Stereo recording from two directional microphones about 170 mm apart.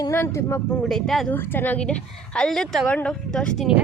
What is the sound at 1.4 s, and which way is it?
A woman's voice, 10° left (ahead or behind).